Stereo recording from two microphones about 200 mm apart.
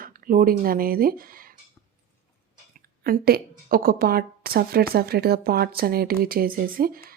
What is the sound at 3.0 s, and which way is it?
Speech, 50° right (ahead or behind).